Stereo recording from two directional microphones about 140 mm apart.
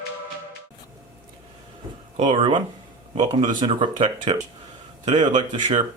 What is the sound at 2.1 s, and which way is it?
Speech, 55° right (ahead or behind).